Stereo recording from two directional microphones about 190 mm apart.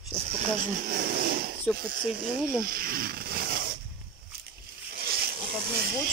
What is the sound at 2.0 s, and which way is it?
Speech, 5° right (ahead or behind).